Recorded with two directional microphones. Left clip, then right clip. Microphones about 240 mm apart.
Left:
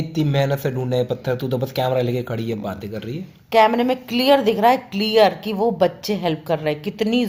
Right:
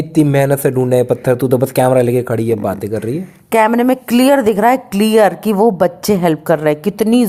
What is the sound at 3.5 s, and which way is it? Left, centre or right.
A woman's voice, right.